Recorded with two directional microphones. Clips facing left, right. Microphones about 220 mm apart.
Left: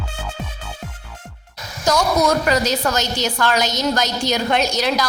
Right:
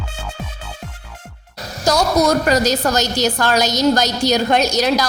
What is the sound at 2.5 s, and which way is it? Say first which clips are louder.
A woman's voice: right 3 dB; 40° right (ahead or behind).